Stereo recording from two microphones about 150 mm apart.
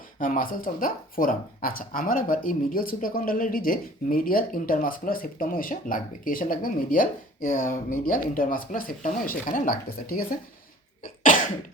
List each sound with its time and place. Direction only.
0.2 s speech: 65° left (ahead or behind)
11.0 s cough: 60° left (ahead or behind)